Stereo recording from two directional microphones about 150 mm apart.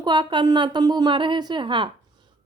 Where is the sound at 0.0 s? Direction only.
30° right (ahead or behind).